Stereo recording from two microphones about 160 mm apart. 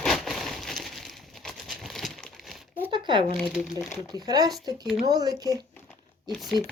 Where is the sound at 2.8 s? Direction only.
30° right (ahead or behind).